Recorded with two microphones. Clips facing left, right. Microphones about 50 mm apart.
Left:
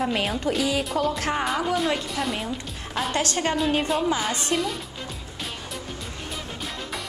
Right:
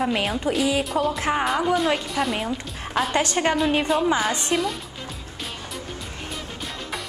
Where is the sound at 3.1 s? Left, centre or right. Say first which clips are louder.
Right 2 dB; right.